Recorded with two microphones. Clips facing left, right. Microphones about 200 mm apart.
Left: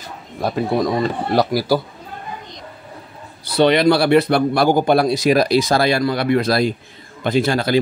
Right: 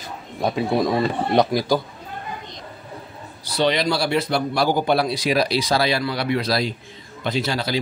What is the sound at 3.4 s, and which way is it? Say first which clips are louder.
A man's voice: left 7 dB; 60° left (ahead or behind).